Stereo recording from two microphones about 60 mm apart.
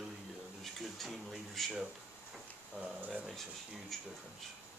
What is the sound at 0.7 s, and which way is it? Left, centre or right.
Speech, centre.